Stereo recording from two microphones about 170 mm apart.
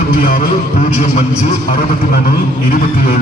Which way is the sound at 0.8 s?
45° left (ahead or behind).